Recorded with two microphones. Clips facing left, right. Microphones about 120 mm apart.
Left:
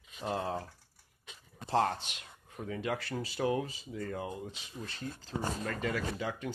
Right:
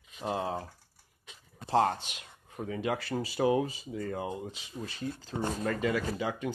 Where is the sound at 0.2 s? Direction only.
10° right (ahead or behind).